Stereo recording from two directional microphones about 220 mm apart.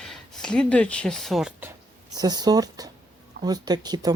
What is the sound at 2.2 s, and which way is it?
Speech, 20° right (ahead or behind).